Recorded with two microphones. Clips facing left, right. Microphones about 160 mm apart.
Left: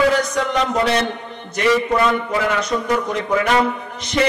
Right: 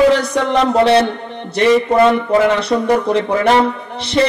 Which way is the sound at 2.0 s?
30° right (ahead or behind).